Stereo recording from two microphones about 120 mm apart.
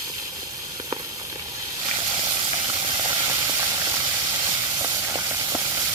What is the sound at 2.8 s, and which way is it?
Steam, 45° right (ahead or behind).